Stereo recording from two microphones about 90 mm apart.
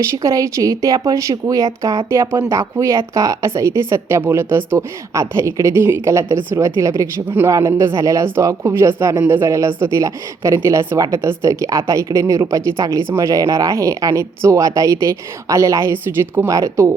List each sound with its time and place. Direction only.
0.0 s speech: 35° right (ahead or behind)